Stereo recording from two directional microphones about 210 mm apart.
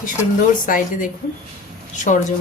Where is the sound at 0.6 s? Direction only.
40° left (ahead or behind).